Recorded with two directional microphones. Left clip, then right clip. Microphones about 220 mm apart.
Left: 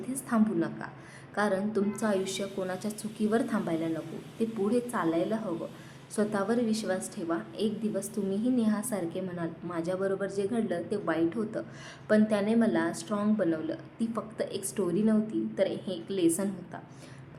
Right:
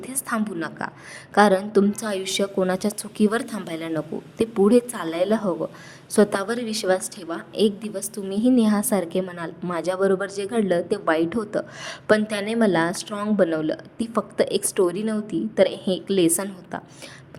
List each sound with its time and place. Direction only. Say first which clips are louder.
0.1 s a woman's voice: right 3 dB; 40° right (ahead or behind)